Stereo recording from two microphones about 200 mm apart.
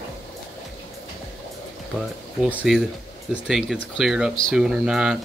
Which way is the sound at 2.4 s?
5° right (ahead or behind).